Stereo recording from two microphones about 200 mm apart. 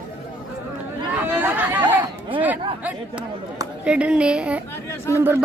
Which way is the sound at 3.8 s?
5° right (ahead or behind).